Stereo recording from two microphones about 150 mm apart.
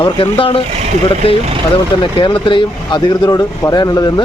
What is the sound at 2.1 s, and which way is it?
Speech, 35° left (ahead or behind).